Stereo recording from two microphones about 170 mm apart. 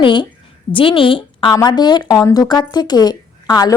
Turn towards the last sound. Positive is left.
turn(degrees=25)  # may be behind; listen again after turning